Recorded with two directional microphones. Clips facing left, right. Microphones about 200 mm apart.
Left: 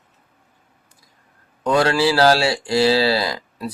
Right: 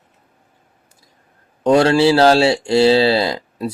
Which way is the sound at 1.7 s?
25° right (ahead or behind).